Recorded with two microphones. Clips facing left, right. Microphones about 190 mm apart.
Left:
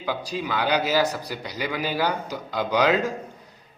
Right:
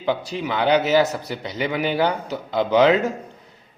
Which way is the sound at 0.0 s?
20° right (ahead or behind).